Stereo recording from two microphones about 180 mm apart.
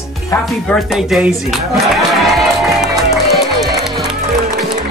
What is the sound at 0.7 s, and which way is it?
Speech, centre (ahead or behind).